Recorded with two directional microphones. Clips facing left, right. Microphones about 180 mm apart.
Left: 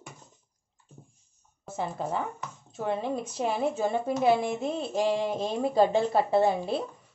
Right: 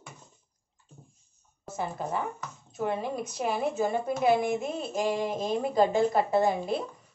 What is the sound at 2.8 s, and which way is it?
Speech, 30° left (ahead or behind).